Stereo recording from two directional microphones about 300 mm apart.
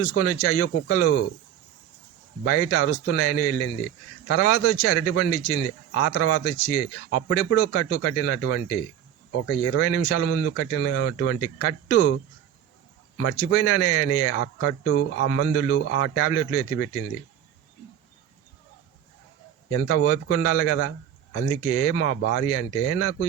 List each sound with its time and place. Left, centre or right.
0.0 s a man's voice: left
2.4 s a man's voice: left
9.6 s a man's voice: left
10.4 s a man's voice: left
19.7 s a man's voice: left